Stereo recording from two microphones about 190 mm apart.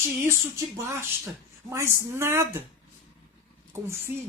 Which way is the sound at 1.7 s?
15° right (ahead or behind).